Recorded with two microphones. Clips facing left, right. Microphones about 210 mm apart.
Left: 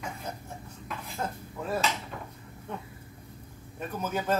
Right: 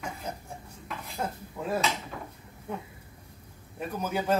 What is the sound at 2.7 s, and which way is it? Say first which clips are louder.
Speech: right 3 dB; 10° right (ahead or behind).